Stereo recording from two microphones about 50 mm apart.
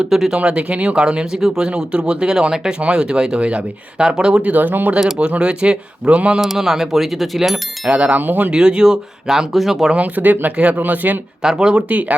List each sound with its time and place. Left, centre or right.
0.0 s speech: centre
0.3 s speech: right
1.0 s speech: centre
1.6 s speech: right
4.5 s speech: right
4.9 s speech: centre
6.4 s speech: centre
7.9 s speech: right
8.2 s speech: right
8.4 s speech: centre
9.5 s speech: centre
9.9 s speech: right
11.4 s speech: centre
11.9 s speech: right